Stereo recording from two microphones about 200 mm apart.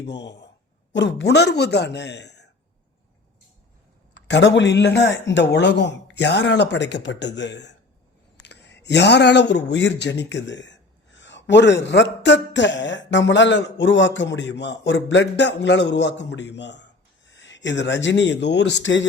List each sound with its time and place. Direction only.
0.0 s speech: 60° left (ahead or behind)
4.1 s a man's voice: 60° left (ahead or behind)